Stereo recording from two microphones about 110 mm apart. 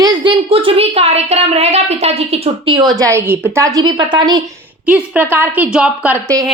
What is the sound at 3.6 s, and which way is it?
Speech, 35° right (ahead or behind).